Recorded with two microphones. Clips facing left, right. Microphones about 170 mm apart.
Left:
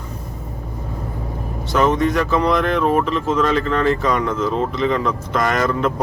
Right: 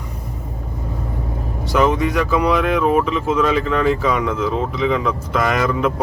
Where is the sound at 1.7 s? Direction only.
10° right (ahead or behind).